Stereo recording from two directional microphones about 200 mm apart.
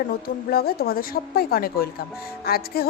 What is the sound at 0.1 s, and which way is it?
A woman's voice, 50° left (ahead or behind).